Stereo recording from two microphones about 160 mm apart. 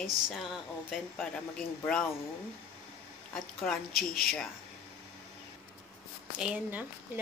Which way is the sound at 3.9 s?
70° left (ahead or behind).